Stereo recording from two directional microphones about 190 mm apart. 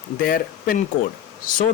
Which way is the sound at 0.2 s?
50° left (ahead or behind).